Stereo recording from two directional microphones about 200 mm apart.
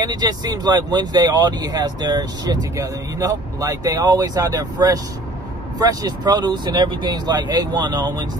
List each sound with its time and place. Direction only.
0.0 s speech: 20° right (ahead or behind)